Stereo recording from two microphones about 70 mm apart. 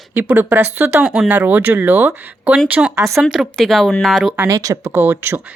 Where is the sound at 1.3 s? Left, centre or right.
Right.